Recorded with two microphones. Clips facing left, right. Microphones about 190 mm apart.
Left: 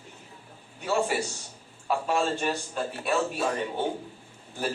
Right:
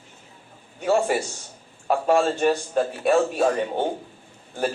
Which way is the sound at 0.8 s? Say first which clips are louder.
Right 6 dB; 45° right (ahead or behind).